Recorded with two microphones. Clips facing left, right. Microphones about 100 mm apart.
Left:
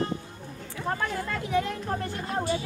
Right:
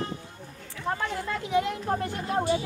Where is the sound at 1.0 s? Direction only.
20° right (ahead or behind).